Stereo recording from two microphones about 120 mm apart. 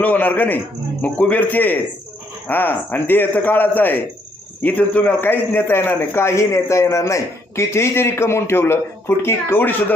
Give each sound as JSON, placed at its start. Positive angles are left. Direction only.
{"t": 0.0, "sound": "a man's voice", "side_deg": 15}